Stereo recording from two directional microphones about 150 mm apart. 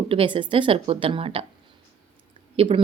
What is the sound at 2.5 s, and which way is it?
Speech, 35° right (ahead or behind).